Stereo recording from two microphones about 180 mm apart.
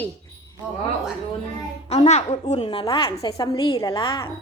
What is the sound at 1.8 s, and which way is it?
A woman's voice, 40° left (ahead or behind).